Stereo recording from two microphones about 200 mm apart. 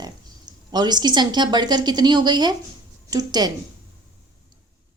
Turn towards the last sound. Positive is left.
turn(degrees=-20)  # may be behind; listen again after turning